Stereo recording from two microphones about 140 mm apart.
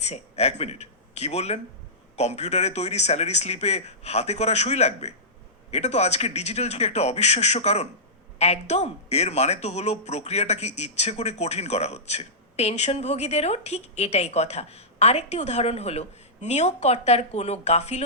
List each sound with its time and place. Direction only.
0.0 s speech: 50° left (ahead or behind)